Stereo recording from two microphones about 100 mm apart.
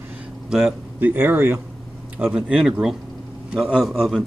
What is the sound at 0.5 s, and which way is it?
Speech, 5° right (ahead or behind).